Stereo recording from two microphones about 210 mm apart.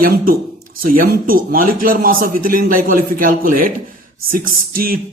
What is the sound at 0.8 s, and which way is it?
Speech, 45° right (ahead or behind).